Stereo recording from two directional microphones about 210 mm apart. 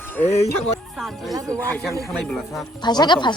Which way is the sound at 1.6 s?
10° left (ahead or behind).